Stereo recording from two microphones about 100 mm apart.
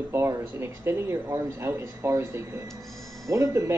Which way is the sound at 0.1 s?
25° right (ahead or behind).